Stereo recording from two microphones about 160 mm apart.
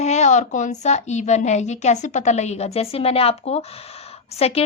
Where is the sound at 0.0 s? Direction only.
45° left (ahead or behind).